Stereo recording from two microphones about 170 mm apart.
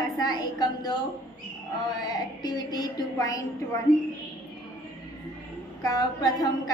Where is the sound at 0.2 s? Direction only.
25° left (ahead or behind).